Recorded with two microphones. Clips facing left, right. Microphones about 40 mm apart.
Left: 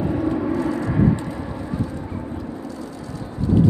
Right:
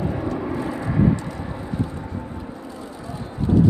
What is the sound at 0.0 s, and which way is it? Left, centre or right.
Vehicle, centre.